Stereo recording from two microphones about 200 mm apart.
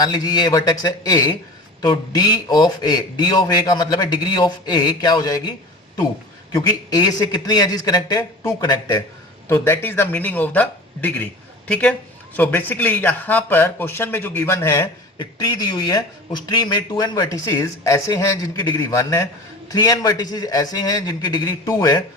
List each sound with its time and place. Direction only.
0.0 s a man's voice: 20° left (ahead or behind)